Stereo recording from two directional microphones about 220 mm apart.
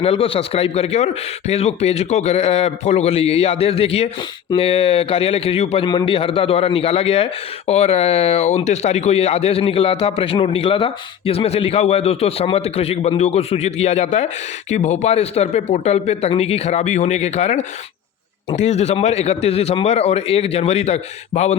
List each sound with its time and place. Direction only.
0.0 s speech: 25° left (ahead or behind)